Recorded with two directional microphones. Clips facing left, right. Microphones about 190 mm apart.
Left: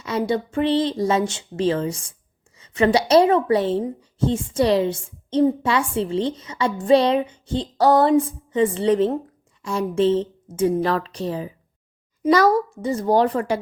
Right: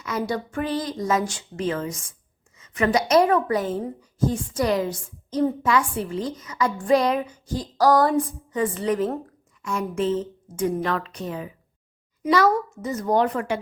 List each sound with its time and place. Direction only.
0.0 s a woman's voice: 25° left (ahead or behind)